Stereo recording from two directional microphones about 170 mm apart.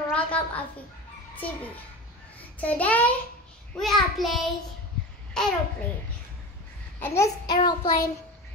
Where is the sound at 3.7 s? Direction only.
Centre (ahead or behind).